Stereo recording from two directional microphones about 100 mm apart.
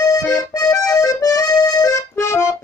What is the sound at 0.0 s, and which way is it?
Accordion, 35° left (ahead or behind).